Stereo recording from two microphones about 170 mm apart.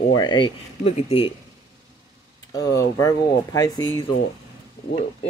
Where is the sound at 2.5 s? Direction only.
20° left (ahead or behind).